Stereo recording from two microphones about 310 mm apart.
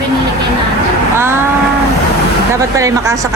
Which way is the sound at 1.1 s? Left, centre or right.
Centre.